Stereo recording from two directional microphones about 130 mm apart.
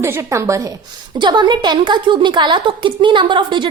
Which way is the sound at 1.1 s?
35° right (ahead or behind).